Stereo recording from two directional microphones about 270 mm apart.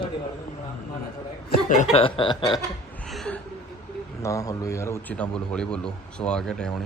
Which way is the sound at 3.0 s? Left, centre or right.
Centre.